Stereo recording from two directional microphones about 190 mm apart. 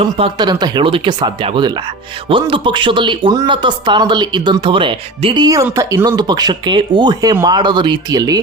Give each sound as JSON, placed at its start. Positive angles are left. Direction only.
{"t": 0.0, "sound": "speech", "side_deg": -25}